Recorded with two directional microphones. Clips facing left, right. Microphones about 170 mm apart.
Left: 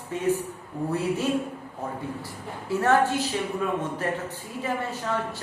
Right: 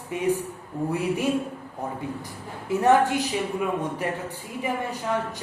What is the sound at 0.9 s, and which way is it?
A man's voice, 15° right (ahead or behind).